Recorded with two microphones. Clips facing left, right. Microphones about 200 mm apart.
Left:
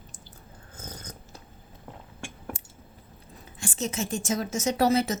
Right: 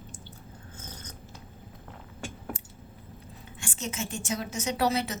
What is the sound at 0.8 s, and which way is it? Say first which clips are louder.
Filing: left 5 dB; 40° left (ahead or behind).